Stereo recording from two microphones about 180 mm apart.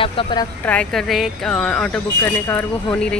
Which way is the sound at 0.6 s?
5° left (ahead or behind).